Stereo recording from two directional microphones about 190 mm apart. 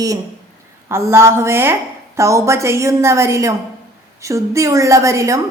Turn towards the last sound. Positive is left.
turn(degrees=-15)  # may be behind; listen again after turning